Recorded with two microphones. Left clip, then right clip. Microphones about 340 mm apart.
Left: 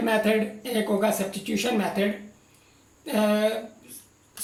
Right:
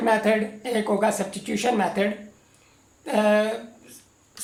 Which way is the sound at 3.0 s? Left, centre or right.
Right.